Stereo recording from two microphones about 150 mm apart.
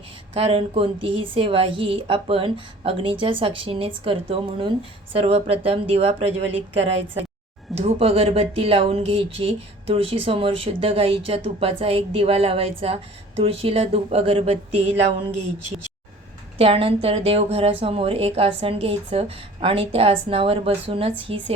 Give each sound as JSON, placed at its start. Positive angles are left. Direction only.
{"t": 0.3, "sound": "speech", "side_deg": -40}
{"t": 16.6, "sound": "speech", "side_deg": -40}